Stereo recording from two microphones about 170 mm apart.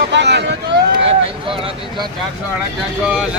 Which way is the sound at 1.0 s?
35° right (ahead or behind).